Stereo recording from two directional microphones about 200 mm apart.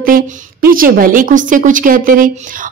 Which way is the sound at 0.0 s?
45° right (ahead or behind).